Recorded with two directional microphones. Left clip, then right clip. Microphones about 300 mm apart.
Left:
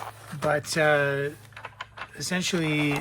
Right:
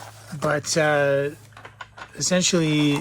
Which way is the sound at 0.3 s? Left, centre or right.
Centre.